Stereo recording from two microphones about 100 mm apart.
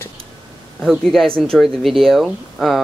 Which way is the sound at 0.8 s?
Centre (ahead or behind).